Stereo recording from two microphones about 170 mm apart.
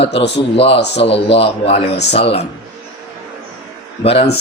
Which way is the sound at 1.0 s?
35° left (ahead or behind).